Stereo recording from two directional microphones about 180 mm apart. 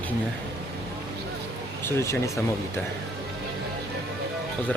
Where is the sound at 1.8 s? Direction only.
15° left (ahead or behind).